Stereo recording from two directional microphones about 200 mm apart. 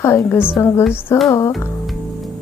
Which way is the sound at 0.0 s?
15° left (ahead or behind).